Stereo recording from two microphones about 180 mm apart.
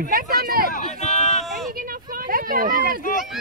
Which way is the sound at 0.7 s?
40° left (ahead or behind).